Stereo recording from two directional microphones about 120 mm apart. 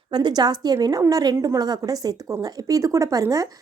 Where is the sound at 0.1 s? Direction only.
40° right (ahead or behind).